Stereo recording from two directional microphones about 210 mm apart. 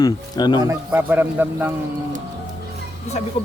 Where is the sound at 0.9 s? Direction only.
10° right (ahead or behind).